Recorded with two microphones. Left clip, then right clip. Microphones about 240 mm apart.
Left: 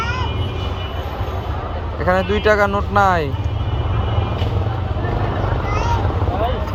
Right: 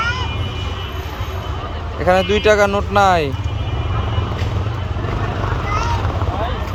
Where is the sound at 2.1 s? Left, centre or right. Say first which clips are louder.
Right 2 dB; centre.